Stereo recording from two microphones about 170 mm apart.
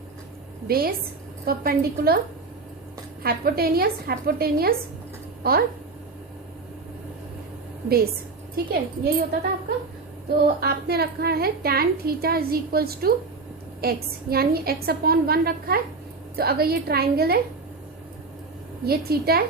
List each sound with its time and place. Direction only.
0.7 s a woman's voice: 60° right (ahead or behind)
3.2 s a woman's voice: 65° right (ahead or behind)
8.5 s a woman's voice: 65° right (ahead or behind)
10.6 s a woman's voice: 65° right (ahead or behind)
18.9 s a woman's voice: 65° right (ahead or behind)